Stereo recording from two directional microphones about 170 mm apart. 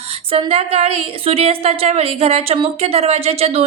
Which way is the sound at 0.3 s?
35° right (ahead or behind).